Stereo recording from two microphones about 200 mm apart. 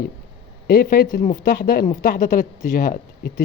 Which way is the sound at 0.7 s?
50° left (ahead or behind).